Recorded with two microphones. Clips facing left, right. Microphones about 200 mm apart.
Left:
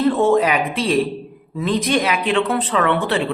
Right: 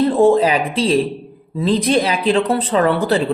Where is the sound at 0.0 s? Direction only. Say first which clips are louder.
Right 3 dB; 30° right (ahead or behind).